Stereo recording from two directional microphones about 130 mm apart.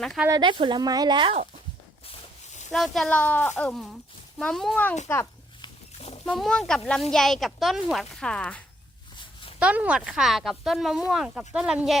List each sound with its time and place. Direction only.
0.3 s speech: 35° right (ahead or behind)
2.7 s a woman's voice: centre (ahead or behind); by 5.3 s 20° left (ahead or behind)
6.0 s a sound: 50° left (ahead or behind)
6.2 s a woman's voice: 5° left (ahead or behind)
9.1 s a sound: 40° left (ahead or behind)
9.6 s a woman's voice: 10° right (ahead or behind)